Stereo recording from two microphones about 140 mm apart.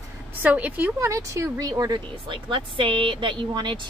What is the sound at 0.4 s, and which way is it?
A woman's voice, 10° right (ahead or behind).